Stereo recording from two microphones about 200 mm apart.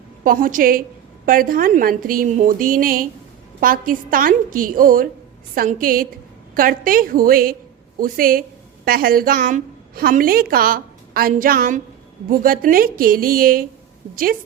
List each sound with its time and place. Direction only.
0.3 s a woman's voice: 45° right (ahead or behind)